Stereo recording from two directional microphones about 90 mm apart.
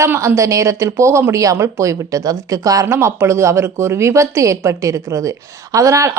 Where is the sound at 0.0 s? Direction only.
30° right (ahead or behind).